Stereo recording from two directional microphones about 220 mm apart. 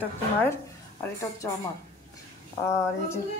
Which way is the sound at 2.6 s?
10° left (ahead or behind).